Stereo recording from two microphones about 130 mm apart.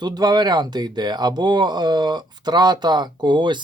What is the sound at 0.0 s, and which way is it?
Speech, 30° right (ahead or behind).